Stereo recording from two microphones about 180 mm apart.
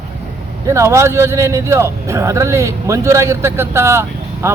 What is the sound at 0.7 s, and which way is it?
A man's voice, 15° right (ahead or behind).